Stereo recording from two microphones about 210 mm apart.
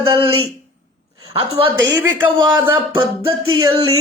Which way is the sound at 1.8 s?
15° right (ahead or behind).